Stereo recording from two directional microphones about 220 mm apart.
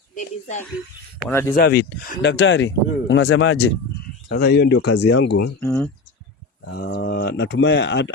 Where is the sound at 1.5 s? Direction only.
45° left (ahead or behind).